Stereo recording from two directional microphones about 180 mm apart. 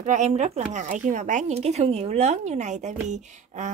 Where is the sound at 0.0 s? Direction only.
40° right (ahead or behind).